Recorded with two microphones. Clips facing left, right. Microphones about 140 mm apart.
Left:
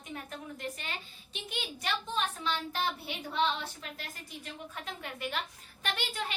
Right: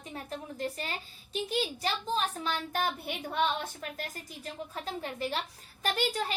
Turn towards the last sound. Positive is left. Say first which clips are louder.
# right 6 dB
turn(degrees=-40)  # may be behind; listen again after turning